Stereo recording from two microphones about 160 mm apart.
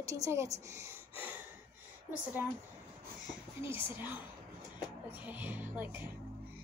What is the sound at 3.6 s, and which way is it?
Speech, 15° right (ahead or behind).